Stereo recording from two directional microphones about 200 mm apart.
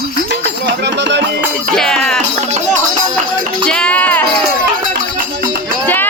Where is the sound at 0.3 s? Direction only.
60° right (ahead or behind).